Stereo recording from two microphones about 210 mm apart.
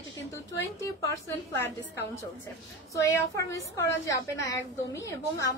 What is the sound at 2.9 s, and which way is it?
A woman's voice, 15° left (ahead or behind).